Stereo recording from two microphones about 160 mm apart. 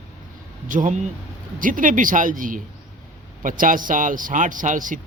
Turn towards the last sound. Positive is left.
turn(degrees=-55)  # may be behind; listen again after turning